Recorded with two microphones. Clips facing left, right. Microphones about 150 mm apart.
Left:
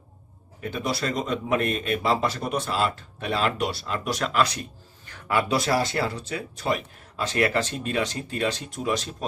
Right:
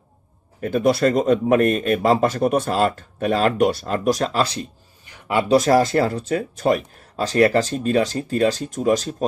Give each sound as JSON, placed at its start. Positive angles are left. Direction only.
{"t": 0.6, "sound": "speech", "side_deg": -45}
{"t": 5.0, "sound": "a sound", "side_deg": -25}
{"t": 5.5, "sound": "speech", "side_deg": -40}